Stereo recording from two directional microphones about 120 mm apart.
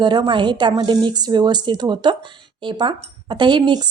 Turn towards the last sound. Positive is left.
turn(degrees=-40)  # may be behind; listen again after turning